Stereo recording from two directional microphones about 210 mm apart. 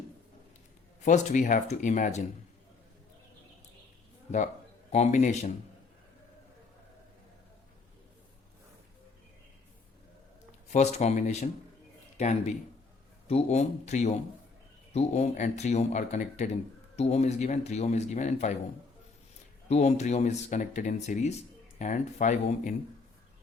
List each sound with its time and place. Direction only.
1.0 s speech: 35° left (ahead or behind)
4.9 s speech: 35° left (ahead or behind)
10.7 s speech: 30° left (ahead or behind)
19.6 s speech: 30° left (ahead or behind)